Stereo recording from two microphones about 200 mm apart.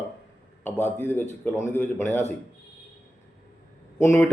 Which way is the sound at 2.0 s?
35° left (ahead or behind).